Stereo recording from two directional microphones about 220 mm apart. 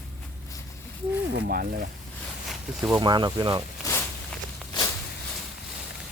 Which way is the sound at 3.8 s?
15° left (ahead or behind).